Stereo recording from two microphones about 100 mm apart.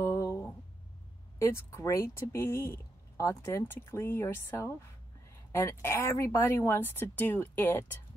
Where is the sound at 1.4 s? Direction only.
30° left (ahead or behind).